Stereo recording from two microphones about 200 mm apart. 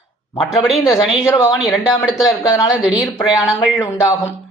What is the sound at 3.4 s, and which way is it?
Speech, 15° left (ahead or behind).